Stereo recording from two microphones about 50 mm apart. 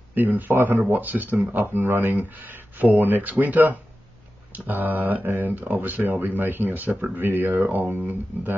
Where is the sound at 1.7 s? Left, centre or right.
Right.